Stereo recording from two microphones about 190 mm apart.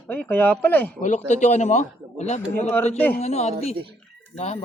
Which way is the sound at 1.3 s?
40° left (ahead or behind).